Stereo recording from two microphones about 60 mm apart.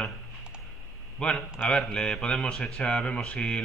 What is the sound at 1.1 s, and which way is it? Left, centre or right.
Speech, centre.